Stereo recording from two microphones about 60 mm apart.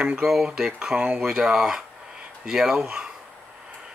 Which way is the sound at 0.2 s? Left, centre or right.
Centre.